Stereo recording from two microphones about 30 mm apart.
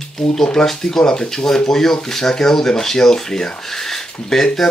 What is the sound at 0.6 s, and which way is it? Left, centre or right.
Speech, centre.